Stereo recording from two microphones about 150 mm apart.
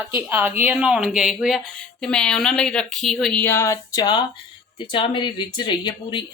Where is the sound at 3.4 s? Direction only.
15° left (ahead or behind).